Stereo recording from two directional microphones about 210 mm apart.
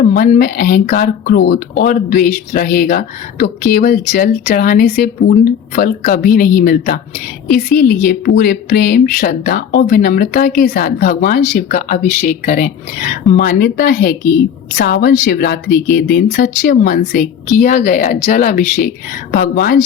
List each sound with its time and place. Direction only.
0.0 s a woman's voice: 45° left (ahead or behind)